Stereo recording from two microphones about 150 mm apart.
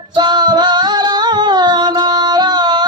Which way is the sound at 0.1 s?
30° right (ahead or behind).